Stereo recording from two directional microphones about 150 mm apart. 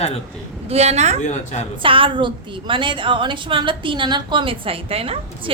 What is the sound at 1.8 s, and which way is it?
A woman's voice, 35° right (ahead or behind).